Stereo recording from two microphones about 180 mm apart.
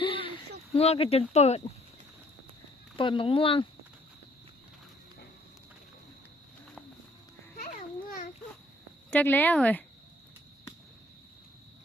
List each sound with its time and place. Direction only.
0.0 s a sound: 30° left (ahead or behind)
0.7 s speech: 35° left (ahead or behind)
2.9 s speech: 25° left (ahead or behind)
7.6 s babbling: 50° left (ahead or behind)
9.0 s speech: 10° left (ahead or behind)